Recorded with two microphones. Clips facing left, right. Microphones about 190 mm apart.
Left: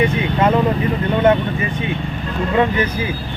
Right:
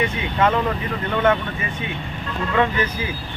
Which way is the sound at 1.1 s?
30° left (ahead or behind).